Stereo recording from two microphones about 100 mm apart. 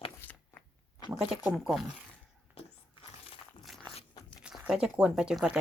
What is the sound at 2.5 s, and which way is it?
Biting, 70° left (ahead or behind).